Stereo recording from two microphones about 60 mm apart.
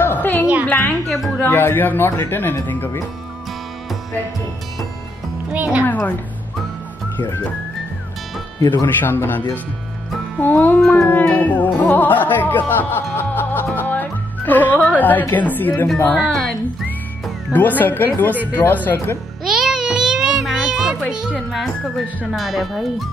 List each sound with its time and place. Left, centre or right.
0.0 s music: left
1.0 s a woman's voice: centre
1.4 s music: left
5.5 s speech: right
5.9 s a woman's voice: left
8.8 s music: left
10.4 s music: left
14.8 s a woman's voice: left
15.3 s music: left
17.5 s music: left
19.4 s a sound: centre
21.1 s music: centre
21.4 s speech: centre